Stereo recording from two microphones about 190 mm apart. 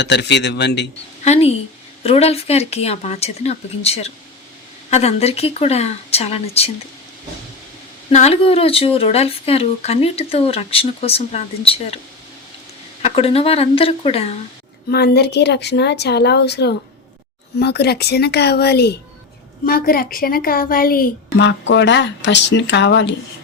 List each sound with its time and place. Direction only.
0.0 s a woman's voice: 65° left (ahead or behind)
1.2 s a woman's voice: 35° left (ahead or behind)
8.1 s speech: 35° left (ahead or behind)
13.0 s speech: 30° left (ahead or behind)
14.8 s a woman's voice: 55° left (ahead or behind)